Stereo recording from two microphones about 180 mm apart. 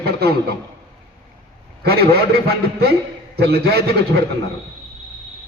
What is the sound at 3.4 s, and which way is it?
Speech, 60° right (ahead or behind).